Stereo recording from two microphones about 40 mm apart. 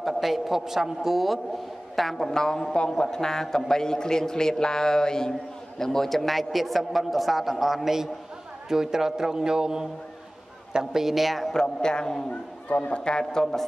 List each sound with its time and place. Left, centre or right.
0.0 s a man's voice: centre
2.3 s a man's voice: centre
11.5 s a man's voice: centre
12.6 s a man's voice: left; by 13.7 s centre